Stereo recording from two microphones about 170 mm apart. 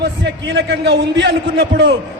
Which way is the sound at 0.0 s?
90° right.